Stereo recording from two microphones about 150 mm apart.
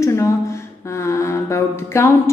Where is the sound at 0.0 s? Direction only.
20° left (ahead or behind).